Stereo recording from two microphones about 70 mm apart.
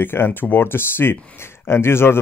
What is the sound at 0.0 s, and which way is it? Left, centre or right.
A man's voice, left.